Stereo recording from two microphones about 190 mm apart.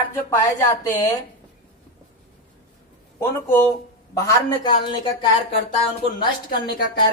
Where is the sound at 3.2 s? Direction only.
10° left (ahead or behind).